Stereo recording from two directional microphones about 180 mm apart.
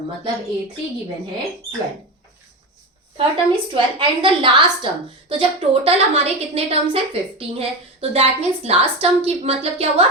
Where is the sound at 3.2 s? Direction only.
30° right (ahead or behind).